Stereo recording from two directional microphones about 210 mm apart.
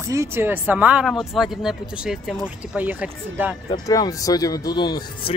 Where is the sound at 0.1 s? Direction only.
10° right (ahead or behind).